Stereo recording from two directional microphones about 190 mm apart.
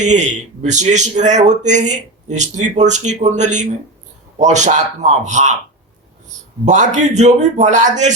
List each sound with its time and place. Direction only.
0.0 s a man's voice: 40° right (ahead or behind)
6.7 s a man's voice: 40° right (ahead or behind)